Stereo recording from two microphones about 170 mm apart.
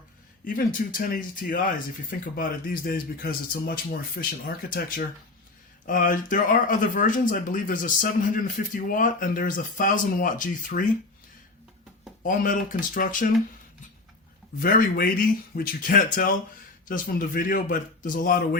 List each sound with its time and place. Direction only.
0.4 s speech: 55° left (ahead or behind)
12.2 s speech: 50° left (ahead or behind)
14.6 s speech: 60° left (ahead or behind)